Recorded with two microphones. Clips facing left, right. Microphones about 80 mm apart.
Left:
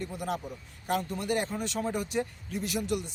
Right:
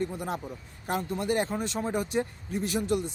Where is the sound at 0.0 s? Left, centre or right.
Right.